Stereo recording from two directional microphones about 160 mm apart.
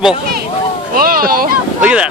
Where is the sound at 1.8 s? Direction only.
5° right (ahead or behind).